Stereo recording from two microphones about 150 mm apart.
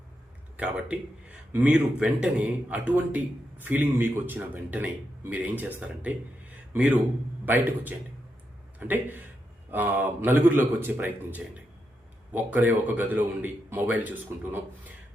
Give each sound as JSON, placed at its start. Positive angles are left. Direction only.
{"t": 0.5, "sound": "a man's voice", "side_deg": -10}